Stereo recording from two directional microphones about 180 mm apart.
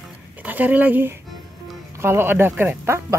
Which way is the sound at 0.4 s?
10° right (ahead or behind).